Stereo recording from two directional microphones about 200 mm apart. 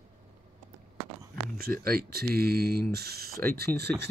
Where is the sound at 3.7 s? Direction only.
10° left (ahead or behind).